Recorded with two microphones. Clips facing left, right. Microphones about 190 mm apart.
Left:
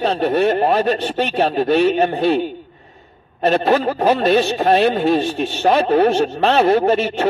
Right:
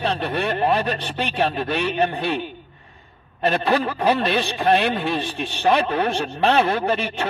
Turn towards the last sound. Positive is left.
turn(degrees=45)  # may be behind; listen again after turning